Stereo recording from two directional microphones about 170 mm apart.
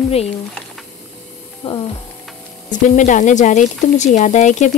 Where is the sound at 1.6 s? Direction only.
35° left (ahead or behind).